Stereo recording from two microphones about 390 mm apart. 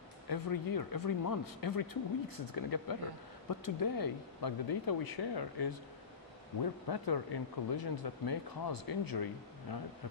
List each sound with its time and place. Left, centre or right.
0.3 s speech: left